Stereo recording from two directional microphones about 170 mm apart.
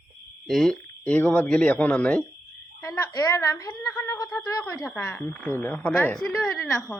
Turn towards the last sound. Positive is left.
turn(degrees=5)  # may be behind; listen again after turning